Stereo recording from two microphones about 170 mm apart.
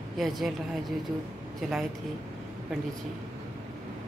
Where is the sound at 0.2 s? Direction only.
Centre (ahead or behind).